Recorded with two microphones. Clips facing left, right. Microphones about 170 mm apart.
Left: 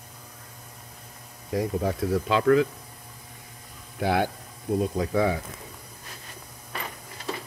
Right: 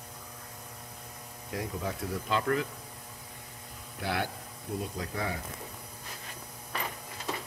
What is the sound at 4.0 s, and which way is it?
Speech, 55° left (ahead or behind).